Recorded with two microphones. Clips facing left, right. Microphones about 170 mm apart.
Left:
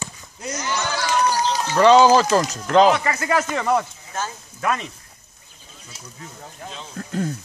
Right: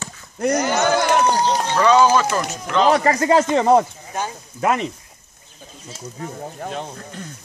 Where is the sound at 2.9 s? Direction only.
35° right (ahead or behind).